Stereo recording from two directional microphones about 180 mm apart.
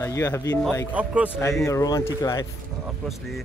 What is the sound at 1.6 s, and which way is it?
Speech, 20° left (ahead or behind).